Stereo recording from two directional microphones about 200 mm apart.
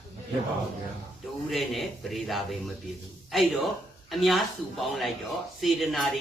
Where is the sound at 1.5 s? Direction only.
Centre (ahead or behind).